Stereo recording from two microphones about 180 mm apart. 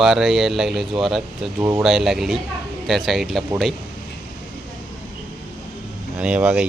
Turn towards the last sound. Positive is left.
turn(degrees=-5)  # may be behind; listen again after turning